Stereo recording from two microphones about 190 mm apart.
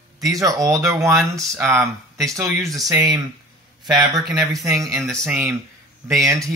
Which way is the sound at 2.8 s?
Centre (ahead or behind).